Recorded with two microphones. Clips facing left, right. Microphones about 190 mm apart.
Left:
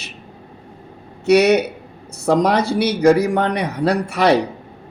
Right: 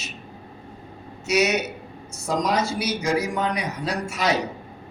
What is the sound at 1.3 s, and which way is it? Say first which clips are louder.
A man's voice: left 9 dB; 60° left (ahead or behind).